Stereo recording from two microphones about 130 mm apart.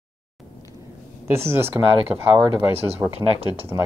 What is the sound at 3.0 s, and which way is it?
Speech, 10° right (ahead or behind).